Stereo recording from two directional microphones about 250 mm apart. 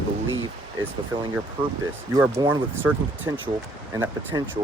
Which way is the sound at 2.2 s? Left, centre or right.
Centre.